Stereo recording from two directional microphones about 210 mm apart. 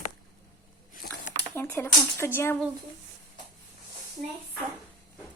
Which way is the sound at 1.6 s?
10° left (ahead or behind).